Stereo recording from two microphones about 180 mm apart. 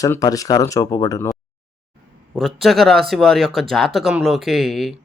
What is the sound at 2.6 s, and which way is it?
Speech, centre (ahead or behind).